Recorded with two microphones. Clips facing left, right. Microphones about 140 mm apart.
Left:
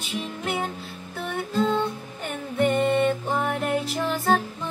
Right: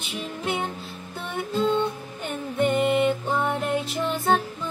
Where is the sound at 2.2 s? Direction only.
20° right (ahead or behind).